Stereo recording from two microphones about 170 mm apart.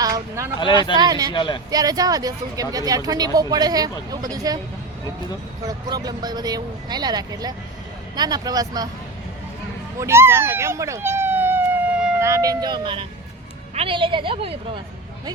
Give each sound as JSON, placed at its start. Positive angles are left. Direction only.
{"t": 0.0, "sound": "speech", "side_deg": -20}
{"t": 1.3, "sound": "speech", "side_deg": 30}
{"t": 1.7, "sound": "speech", "side_deg": -20}
{"t": 5.6, "sound": "speech", "side_deg": -25}
{"t": 10.0, "sound": "a sound", "side_deg": -15}
{"t": 12.2, "sound": "a woman's voice", "side_deg": -20}